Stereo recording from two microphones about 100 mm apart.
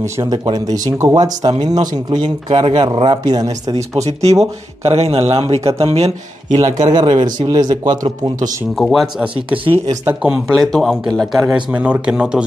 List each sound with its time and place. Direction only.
0.3 s speech: 40° right (ahead or behind)
3.3 s speech: 40° right (ahead or behind)
4.0 s speech: 90° right
6.5 s speech: 45° right (ahead or behind)
8.7 s speech: centre (ahead or behind)
9.5 s speech: 15° right (ahead or behind)
10.5 s speech: 5° left (ahead or behind)
11.7 s speech: 10° right (ahead or behind)